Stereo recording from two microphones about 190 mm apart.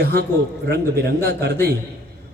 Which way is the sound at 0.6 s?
55° right (ahead or behind).